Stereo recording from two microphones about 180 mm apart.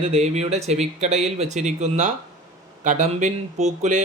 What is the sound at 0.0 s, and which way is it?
Speech, 35° right (ahead or behind).